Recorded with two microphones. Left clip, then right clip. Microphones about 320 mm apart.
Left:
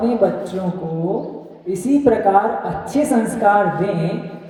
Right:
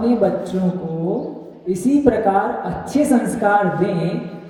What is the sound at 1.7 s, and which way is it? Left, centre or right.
A woman's voice, centre.